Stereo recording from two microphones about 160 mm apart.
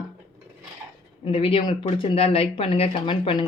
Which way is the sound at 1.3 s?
35° left (ahead or behind).